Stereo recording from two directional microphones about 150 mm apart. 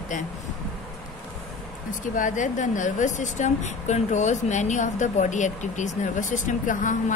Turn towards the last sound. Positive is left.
turn(degrees=60)  # may be behind; listen again after turning